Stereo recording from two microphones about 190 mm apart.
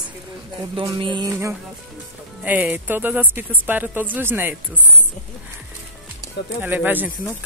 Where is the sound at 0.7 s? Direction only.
25° right (ahead or behind); by 4.8 s 10° right (ahead or behind).